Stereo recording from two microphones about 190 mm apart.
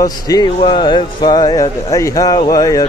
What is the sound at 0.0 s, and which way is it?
Speech, 20° left (ahead or behind).